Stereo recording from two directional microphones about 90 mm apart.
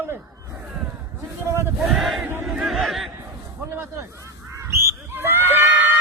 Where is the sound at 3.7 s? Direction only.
30° right (ahead or behind).